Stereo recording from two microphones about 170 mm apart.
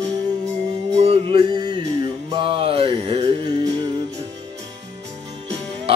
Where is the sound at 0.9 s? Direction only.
35° right (ahead or behind).